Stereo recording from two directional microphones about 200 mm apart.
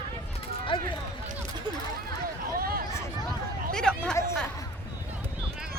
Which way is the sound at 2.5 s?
45° right (ahead or behind).